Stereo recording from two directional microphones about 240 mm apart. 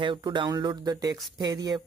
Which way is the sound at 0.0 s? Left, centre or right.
Centre.